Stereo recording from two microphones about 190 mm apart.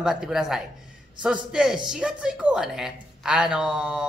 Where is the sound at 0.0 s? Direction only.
5° right (ahead or behind).